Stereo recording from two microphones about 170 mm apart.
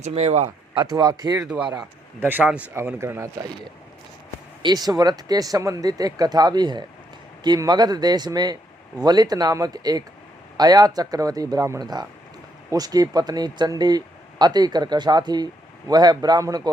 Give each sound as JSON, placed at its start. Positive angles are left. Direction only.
{"t": 0.0, "sound": "speech", "side_deg": -40}
{"t": 0.8, "sound": "speech", "side_deg": -25}
{"t": 1.5, "sound": "speech", "side_deg": -5}